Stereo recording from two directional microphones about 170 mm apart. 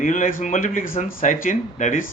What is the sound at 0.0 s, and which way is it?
Speech, 50° left (ahead or behind).